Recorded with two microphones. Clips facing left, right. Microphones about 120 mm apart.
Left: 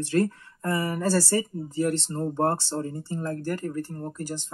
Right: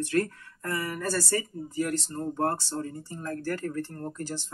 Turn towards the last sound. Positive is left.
turn(degrees=15)  # may be behind; listen again after turning